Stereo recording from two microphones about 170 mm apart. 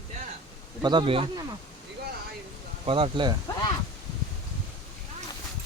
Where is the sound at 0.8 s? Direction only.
30° right (ahead or behind).